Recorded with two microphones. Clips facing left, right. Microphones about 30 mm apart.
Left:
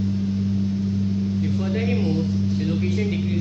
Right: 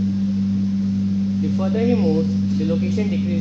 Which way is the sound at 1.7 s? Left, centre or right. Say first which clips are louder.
Right 8 dB; centre.